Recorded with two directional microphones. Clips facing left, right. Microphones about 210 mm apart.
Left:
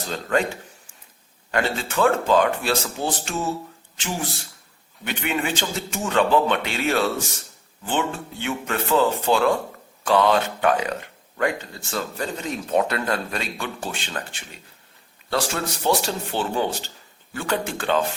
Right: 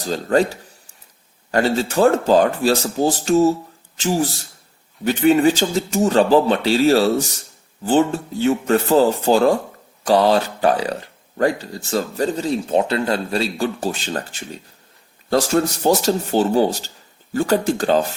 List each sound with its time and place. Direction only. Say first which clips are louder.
0.0 s speech: right 6 dB; 35° right (ahead or behind)